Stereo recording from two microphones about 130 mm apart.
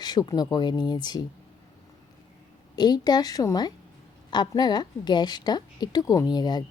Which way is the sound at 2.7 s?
35° left (ahead or behind).